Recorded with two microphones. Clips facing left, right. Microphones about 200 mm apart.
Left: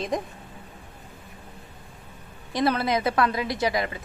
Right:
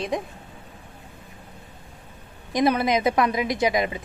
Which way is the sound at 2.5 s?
15° right (ahead or behind).